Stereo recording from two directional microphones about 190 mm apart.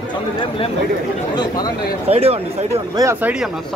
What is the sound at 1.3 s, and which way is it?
Speech, 20° left (ahead or behind).